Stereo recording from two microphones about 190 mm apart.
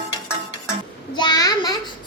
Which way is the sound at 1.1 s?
20° left (ahead or behind).